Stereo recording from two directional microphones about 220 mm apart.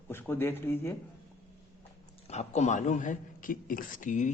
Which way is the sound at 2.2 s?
30° left (ahead or behind).